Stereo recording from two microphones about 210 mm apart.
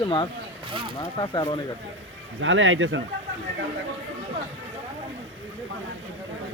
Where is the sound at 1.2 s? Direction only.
20° left (ahead or behind).